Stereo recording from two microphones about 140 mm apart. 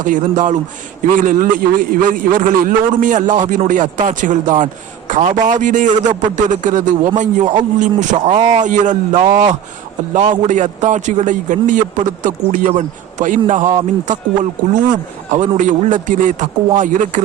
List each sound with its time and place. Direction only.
0.0 s a man's voice: 65° right (ahead or behind)
8.1 s speech: 50° right (ahead or behind)
8.5 s a man's voice: 60° right (ahead or behind)
15.3 s a man's voice: 60° right (ahead or behind)